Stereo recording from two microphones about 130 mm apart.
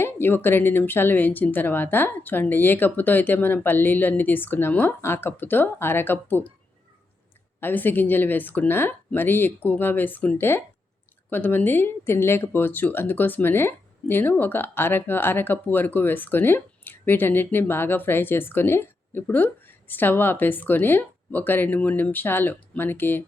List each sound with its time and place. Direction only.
0.0 s speech: 15° left (ahead or behind)
7.6 s speech: 15° left (ahead or behind)